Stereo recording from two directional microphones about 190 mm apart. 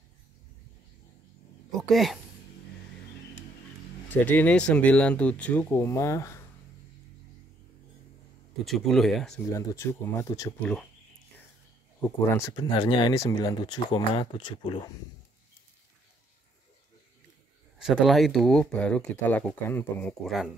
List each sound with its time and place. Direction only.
1.8 s speech: centre (ahead or behind)
4.1 s speech: 10° left (ahead or behind)
8.6 s speech: centre (ahead or behind)
9.5 s speech: 15° left (ahead or behind)
10.6 s speech: 5° left (ahead or behind)
12.0 s speech: 15° left (ahead or behind)
17.7 s speech: centre (ahead or behind)